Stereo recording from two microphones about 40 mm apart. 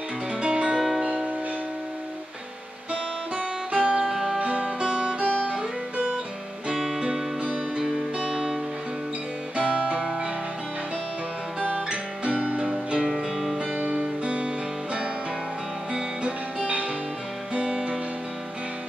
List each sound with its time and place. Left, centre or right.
0.4 s music: right
0.7 s music: centre
1.0 s music: right
2.9 s guitar: right
4.1 s music: centre
4.4 s music: right
9.6 s music: right
11.7 s music: right
13.0 s music: centre
13.6 s music: right
17.6 s music: right